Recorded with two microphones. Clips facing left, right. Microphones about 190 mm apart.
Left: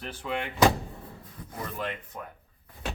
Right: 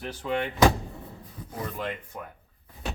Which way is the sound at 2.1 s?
Centre (ahead or behind).